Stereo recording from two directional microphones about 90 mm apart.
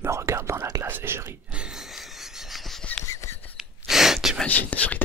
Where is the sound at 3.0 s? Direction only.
30° left (ahead or behind).